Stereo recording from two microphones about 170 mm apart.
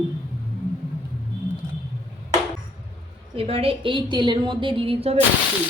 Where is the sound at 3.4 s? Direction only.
35° right (ahead or behind).